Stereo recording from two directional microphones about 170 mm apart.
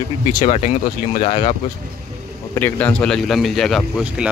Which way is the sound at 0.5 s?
40° left (ahead or behind).